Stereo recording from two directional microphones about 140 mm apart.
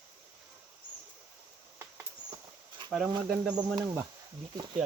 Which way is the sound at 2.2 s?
30° right (ahead or behind).